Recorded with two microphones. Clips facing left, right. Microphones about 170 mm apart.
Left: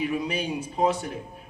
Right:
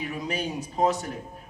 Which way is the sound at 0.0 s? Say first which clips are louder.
Left 3 dB; 45° right (ahead or behind).